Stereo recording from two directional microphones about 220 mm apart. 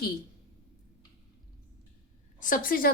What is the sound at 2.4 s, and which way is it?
Speech, 40° left (ahead or behind).